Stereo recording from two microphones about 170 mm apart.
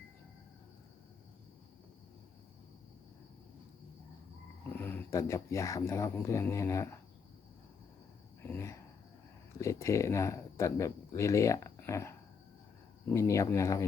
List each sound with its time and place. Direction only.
4.7 s speech: 10° left (ahead or behind)
8.4 s speech: 15° left (ahead or behind)